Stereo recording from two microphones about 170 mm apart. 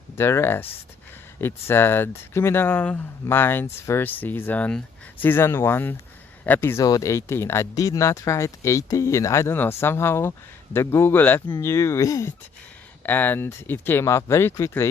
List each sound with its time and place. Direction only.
0.2 s speech: 15° left (ahead or behind)
11.4 s speech: 20° left (ahead or behind)